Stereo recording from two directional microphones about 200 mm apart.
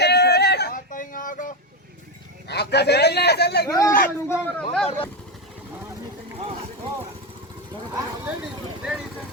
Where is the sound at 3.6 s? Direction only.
15° left (ahead or behind).